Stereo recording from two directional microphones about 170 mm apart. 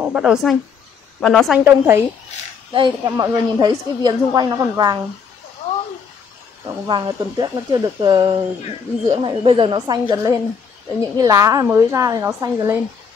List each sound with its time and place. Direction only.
0.0 s a woman's voice: 5° right (ahead or behind)
1.6 s speech: 15° right (ahead or behind)
2.7 s a woman's voice: 25° right (ahead or behind)
6.9 s a woman's voice: 25° right (ahead or behind)